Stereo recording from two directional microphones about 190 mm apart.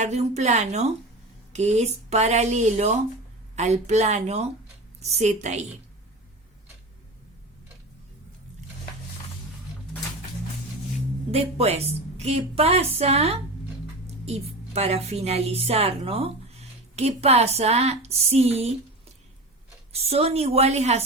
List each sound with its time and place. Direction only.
0.0 s a woman's voice: 35° right (ahead or behind)
11.3 s a woman's voice: 30° right (ahead or behind)
19.9 s a woman's voice: 30° right (ahead or behind)